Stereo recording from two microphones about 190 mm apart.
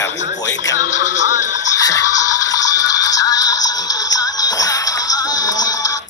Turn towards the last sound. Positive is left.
turn(degrees=20)  # may be behind; listen again after turning